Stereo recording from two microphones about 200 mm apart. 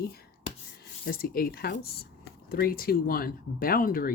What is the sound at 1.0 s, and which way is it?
Speech, 50° left (ahead or behind).